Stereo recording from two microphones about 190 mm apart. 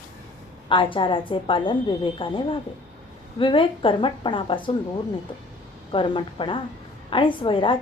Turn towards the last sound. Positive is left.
turn(degrees=25)  # may be behind; listen again after turning